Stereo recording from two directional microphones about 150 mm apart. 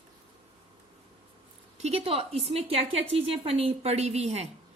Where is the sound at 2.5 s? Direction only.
40° right (ahead or behind).